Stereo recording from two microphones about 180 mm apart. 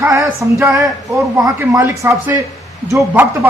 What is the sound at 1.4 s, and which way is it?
Speech, 15° right (ahead or behind).